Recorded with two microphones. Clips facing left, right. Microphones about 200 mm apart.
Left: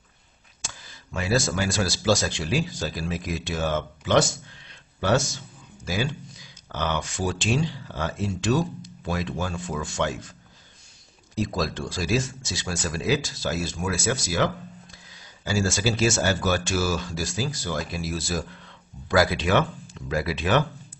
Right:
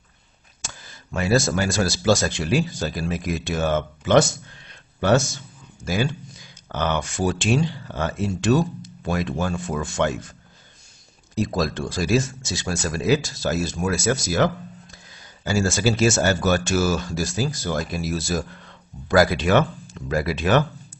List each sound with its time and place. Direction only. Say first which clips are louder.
0.6 s speech: right 2 dB; 50° right (ahead or behind)
11.3 s speech: right 3 dB; 50° right (ahead or behind)